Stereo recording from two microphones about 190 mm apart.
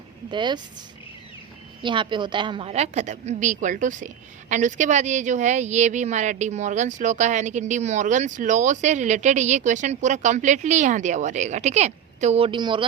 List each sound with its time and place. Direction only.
0.3 s speech: 25° right (ahead or behind)
1.8 s a woman's voice: 25° right (ahead or behind)